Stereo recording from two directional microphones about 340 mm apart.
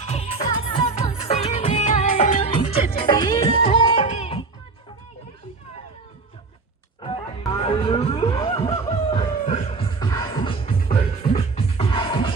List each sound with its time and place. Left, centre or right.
0.0 s music: centre
7.0 s music: centre